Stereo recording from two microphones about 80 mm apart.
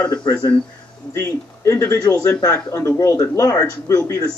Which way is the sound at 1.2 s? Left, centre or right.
Left.